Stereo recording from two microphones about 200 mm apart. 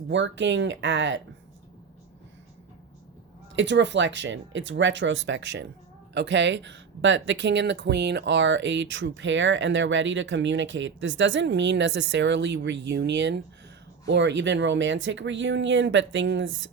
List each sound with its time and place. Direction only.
0.1 s speech: 65° right (ahead or behind)
3.5 s speech: 65° right (ahead or behind)